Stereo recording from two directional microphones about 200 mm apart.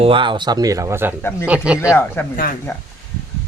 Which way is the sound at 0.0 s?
25° right (ahead or behind).